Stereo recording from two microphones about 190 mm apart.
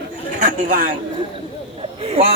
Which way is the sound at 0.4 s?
45° right (ahead or behind).